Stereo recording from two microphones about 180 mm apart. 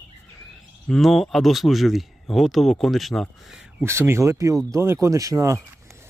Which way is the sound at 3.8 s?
15° right (ahead or behind).